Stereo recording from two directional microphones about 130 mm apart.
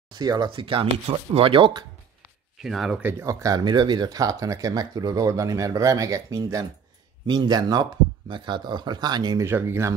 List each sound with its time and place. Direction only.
0.1 s speech: 35° right (ahead or behind)
2.6 s speech: 5° right (ahead or behind)
3.0 s speech: 15° right (ahead or behind); by 9.4 s 35° right (ahead or behind)
9.4 s speech: 20° right (ahead or behind)